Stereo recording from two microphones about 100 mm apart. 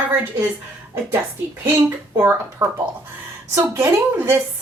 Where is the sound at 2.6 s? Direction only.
40° right (ahead or behind).